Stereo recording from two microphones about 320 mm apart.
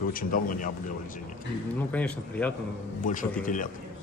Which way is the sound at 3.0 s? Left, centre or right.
Left.